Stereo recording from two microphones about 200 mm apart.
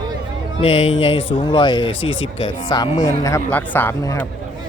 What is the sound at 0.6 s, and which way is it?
Speech, 30° left (ahead or behind).